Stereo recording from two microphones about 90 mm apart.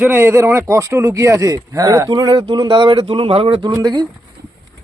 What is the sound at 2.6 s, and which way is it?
Speech, 65° right (ahead or behind).